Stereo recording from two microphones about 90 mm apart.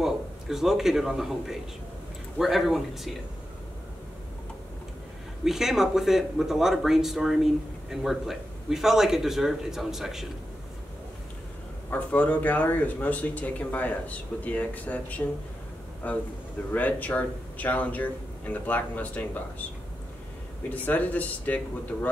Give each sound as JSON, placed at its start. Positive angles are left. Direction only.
{"t": 0.0, "sound": "a man's voice", "side_deg": -5}
{"t": 5.4, "sound": "speech", "side_deg": -5}
{"t": 11.9, "sound": "speech", "side_deg": 15}
{"t": 20.7, "sound": "speech", "side_deg": 15}